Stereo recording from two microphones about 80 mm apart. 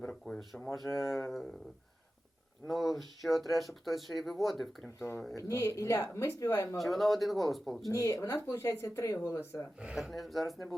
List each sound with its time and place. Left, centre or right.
0.1 s speech: centre
2.6 s speech: centre
4.9 s speech: left
6.7 s speech: centre
7.9 s speech: left
10.0 s speech: centre